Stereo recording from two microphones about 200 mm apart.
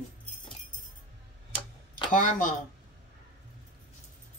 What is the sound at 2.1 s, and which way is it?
Speech, 40° left (ahead or behind).